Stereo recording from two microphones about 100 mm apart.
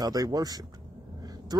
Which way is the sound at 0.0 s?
40° right (ahead or behind).